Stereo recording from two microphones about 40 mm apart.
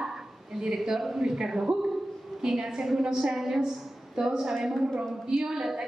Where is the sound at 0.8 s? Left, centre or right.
Centre.